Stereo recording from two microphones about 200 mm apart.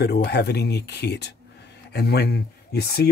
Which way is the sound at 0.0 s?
55° left (ahead or behind).